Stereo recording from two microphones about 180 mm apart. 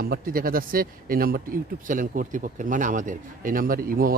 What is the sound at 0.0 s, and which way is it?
Speech, 55° right (ahead or behind).